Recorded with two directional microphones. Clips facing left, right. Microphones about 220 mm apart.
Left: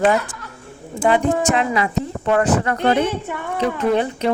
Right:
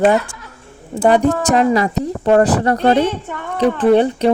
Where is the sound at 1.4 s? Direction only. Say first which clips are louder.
Right 5 dB; 40° right (ahead or behind).